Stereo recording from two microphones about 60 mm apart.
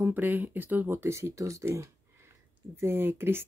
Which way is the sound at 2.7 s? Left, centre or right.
Right.